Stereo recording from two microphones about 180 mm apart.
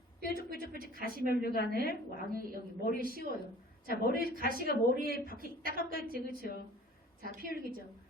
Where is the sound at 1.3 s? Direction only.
55° left (ahead or behind).